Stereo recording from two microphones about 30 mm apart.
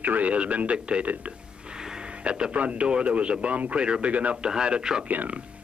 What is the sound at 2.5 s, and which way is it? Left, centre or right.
Speech, right.